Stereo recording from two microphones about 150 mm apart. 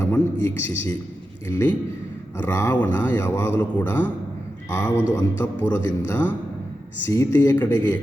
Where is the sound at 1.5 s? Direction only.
15° left (ahead or behind).